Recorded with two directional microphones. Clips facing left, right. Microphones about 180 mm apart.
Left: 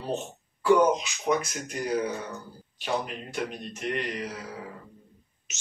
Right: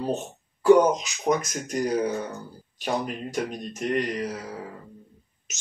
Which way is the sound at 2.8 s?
45° right (ahead or behind).